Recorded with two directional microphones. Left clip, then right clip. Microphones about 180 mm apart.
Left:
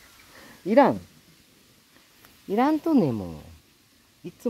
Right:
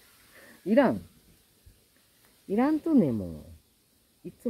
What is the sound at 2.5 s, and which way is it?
Speech, 25° left (ahead or behind).